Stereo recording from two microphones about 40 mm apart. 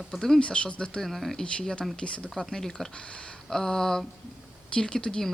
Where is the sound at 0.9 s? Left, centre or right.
Centre.